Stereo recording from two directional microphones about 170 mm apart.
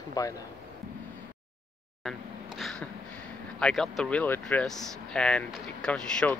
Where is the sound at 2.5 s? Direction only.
5° left (ahead or behind).